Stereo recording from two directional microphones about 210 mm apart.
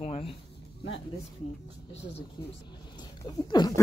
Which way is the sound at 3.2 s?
20° left (ahead or behind).